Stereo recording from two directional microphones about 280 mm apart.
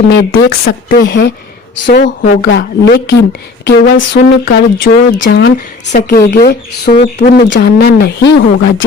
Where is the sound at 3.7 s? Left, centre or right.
Left.